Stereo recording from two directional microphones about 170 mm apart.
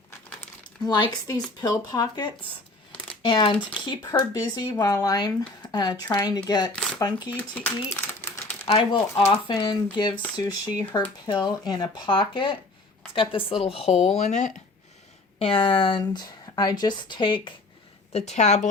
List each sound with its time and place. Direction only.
1.6 s speech: 25° left (ahead or behind)
7.3 s a sound: 10° left (ahead or behind)
8.6 s speech: 30° left (ahead or behind); by 14.6 s 45° left (ahead or behind)
15.4 s speech: 30° left (ahead or behind)
18.1 s a woman's voice: 40° left (ahead or behind)